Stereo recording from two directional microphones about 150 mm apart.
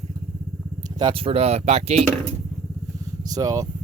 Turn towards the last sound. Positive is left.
turn(degrees=-25)  # may be behind; listen again after turning